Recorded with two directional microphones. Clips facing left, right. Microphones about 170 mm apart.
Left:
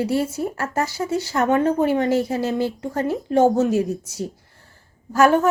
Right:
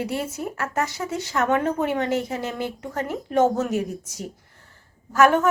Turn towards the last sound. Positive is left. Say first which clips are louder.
# left 2 dB
turn(degrees=30)  # may be behind; listen again after turning